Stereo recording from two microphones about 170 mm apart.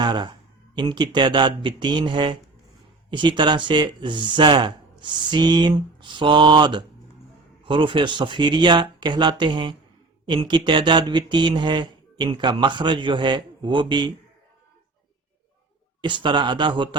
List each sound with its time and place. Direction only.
0.0 s speech: 25° right (ahead or behind)
16.0 s speech: 30° right (ahead or behind)